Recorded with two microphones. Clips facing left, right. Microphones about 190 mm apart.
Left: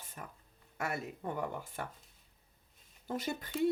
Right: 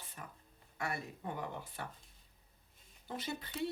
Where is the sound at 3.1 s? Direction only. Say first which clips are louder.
Left 5 dB; 50° left (ahead or behind).